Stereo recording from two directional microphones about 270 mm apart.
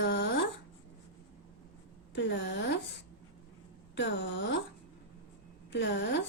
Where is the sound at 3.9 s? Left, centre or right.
Left.